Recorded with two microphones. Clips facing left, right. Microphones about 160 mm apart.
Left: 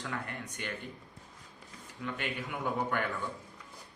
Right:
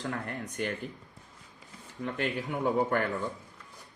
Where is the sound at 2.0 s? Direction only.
40° right (ahead or behind).